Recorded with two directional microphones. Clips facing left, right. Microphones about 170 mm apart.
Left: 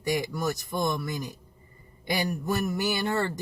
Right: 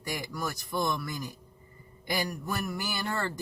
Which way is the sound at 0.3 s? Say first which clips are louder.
Left 3 dB; 20° left (ahead or behind).